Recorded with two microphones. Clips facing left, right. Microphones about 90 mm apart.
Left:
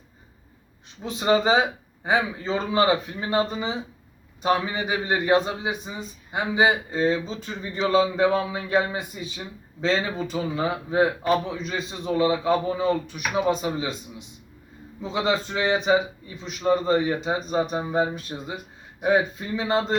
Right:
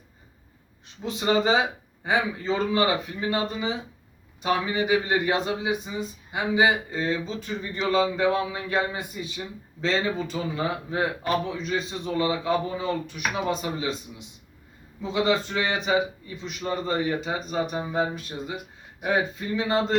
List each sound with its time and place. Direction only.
1.0 s a man's voice: 20° left (ahead or behind)
8.3 s a man's voice: 5° left (ahead or behind)
15.0 s a man's voice: 20° left (ahead or behind)